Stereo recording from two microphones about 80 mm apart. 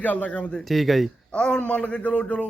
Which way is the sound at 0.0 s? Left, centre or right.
Centre.